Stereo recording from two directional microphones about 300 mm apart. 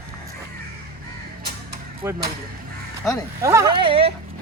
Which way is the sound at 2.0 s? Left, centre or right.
Centre.